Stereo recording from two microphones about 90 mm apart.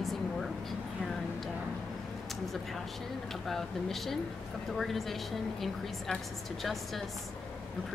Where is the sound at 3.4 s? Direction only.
5° left (ahead or behind).